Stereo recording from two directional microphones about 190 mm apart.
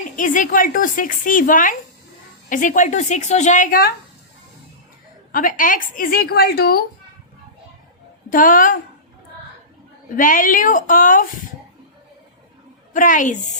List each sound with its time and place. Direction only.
0.2 s a woman's voice: 45° left (ahead or behind)
5.3 s a woman's voice: 45° left (ahead or behind)
8.3 s a woman's voice: 45° left (ahead or behind)
10.2 s a woman's voice: 45° left (ahead or behind)
12.9 s a woman's voice: 45° left (ahead or behind)